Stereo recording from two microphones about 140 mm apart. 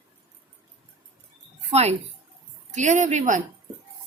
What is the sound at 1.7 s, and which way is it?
Speech, 50° right (ahead or behind).